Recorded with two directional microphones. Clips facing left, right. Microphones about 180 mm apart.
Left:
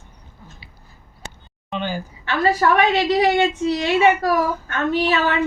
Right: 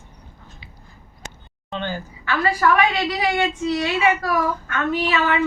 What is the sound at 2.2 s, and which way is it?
A woman's voice, 25° left (ahead or behind).